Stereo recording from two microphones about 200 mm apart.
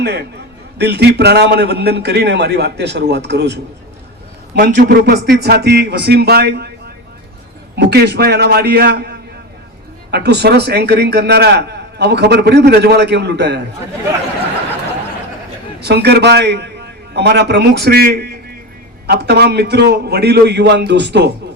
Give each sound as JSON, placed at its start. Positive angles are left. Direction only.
{"t": 0.0, "sound": "a man's voice", "side_deg": -55}
{"t": 4.5, "sound": "a man's voice", "side_deg": -50}
{"t": 15.8, "sound": "a man's voice", "side_deg": -55}